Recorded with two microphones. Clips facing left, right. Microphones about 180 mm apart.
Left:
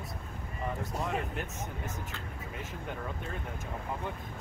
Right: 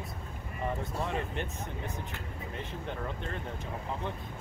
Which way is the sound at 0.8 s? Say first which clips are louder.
Even; centre (ahead or behind).